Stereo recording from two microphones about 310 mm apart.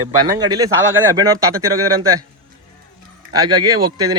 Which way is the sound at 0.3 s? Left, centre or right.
Centre.